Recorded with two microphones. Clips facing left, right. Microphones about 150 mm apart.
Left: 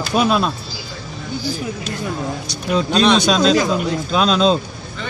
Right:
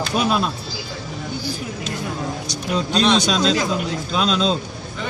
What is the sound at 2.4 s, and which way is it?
Speech, 60° left (ahead or behind).